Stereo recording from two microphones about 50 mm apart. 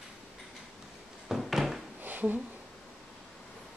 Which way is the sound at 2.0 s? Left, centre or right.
Right.